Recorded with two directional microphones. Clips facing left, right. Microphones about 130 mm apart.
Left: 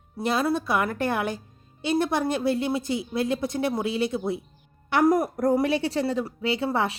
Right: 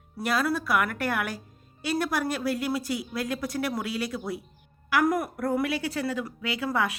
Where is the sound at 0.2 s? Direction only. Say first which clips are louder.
Left 2 dB; 25° left (ahead or behind).